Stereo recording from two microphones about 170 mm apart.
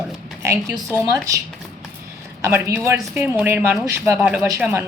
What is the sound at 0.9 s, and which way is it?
Speech, 15° right (ahead or behind).